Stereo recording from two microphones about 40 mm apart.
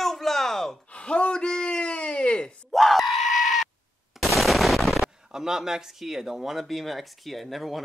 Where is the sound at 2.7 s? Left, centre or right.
Centre.